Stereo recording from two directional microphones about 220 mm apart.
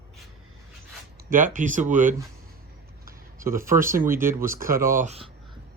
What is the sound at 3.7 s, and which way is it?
Speech, 10° right (ahead or behind).